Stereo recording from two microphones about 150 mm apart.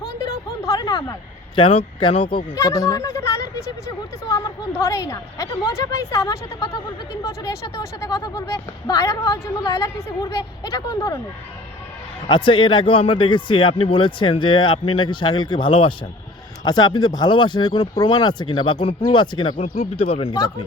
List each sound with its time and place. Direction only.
0.0 s a sound: 20° left (ahead or behind)
1.5 s speech: 35° left (ahead or behind)
2.6 s speech: 25° left (ahead or behind)
12.3 s speech: 35° left (ahead or behind)
19.5 s speech: 70° left (ahead or behind)
20.0 s speech: 40° left (ahead or behind)
20.3 s speech: 25° left (ahead or behind)